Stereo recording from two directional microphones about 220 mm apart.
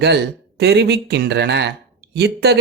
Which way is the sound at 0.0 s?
50° right (ahead or behind).